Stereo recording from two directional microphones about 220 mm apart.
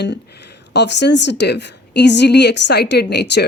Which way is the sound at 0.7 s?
50° left (ahead or behind).